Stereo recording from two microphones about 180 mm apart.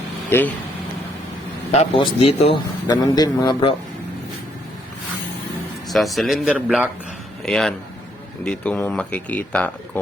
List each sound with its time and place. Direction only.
0.3 s speech: 10° left (ahead or behind)
1.8 s speech: 30° left (ahead or behind)
2.8 s a man's voice: 20° left (ahead or behind)
5.9 s a man's voice: centre (ahead or behind)